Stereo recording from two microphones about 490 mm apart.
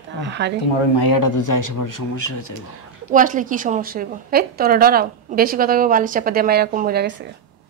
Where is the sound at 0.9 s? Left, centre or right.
Left.